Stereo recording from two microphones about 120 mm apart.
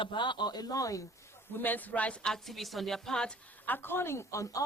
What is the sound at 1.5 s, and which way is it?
A woman's voice, 15° left (ahead or behind).